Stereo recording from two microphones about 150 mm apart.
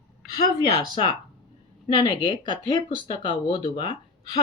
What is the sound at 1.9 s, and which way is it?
Speech, 35° left (ahead or behind).